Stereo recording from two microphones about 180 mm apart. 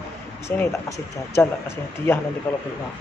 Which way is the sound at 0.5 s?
15° left (ahead or behind).